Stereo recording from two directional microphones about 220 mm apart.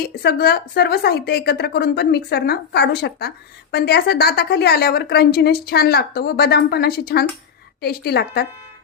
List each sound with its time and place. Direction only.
0.2 s a woman's voice: 45° left (ahead or behind)